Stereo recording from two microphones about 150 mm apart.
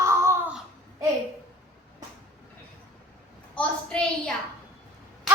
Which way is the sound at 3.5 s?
5° left (ahead or behind).